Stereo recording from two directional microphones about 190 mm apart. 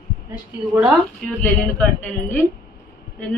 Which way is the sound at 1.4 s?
5° left (ahead or behind).